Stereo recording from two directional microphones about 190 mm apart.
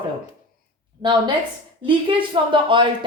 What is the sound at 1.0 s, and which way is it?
A woman's voice, 25° right (ahead or behind).